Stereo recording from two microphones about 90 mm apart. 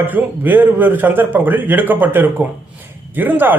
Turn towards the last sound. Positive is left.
turn(degrees=-20)  # may be behind; listen again after turning